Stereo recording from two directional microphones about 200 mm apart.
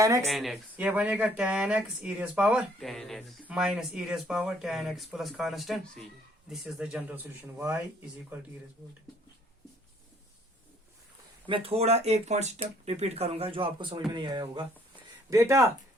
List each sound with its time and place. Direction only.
0.0 s speech: 15° right (ahead or behind)
0.3 s speech: centre (ahead or behind)
11.4 s speech: 25° right (ahead or behind)